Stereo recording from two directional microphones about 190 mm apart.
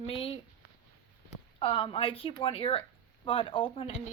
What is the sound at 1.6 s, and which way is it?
A woman's voice, 30° left (ahead or behind).